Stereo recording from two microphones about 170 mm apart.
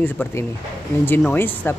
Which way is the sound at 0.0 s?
15° left (ahead or behind).